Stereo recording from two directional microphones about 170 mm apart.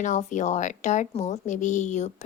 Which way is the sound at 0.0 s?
45° left (ahead or behind).